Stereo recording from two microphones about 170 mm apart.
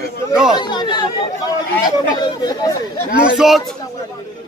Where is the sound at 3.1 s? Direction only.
5° right (ahead or behind).